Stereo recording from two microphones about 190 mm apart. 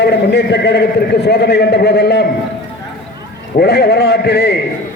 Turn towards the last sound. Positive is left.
turn(degrees=60)  # may be behind; listen again after turning